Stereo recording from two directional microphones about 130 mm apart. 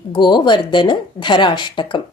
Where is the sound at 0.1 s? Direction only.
35° left (ahead or behind).